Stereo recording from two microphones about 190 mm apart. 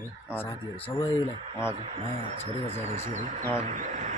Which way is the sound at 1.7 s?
30° right (ahead or behind).